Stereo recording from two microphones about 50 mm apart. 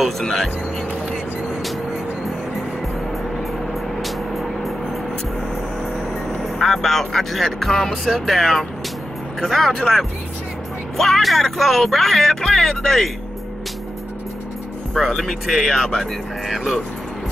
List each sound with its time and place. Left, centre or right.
0.2 s speech: centre
4.0 s vehicle: centre
6.6 s speech: centre
15.0 s speech: centre